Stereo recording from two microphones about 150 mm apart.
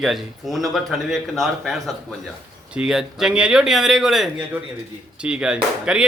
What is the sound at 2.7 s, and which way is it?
A man's voice, 5° right (ahead or behind).